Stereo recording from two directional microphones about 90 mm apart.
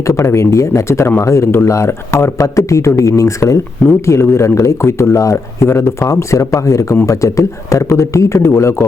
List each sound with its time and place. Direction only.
0.1 s speech: 35° left (ahead or behind)